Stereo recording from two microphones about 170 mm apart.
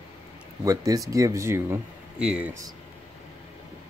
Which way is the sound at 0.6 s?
20° right (ahead or behind).